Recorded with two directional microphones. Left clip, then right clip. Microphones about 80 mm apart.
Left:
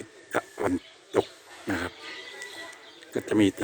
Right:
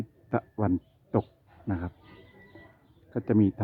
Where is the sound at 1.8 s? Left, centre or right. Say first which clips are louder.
Left 7 dB; left.